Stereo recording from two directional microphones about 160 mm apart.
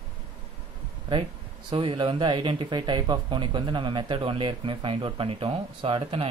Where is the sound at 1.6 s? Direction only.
35° right (ahead or behind).